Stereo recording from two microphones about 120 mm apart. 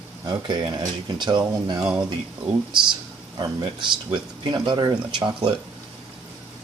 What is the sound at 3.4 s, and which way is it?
Speech, 40° right (ahead or behind).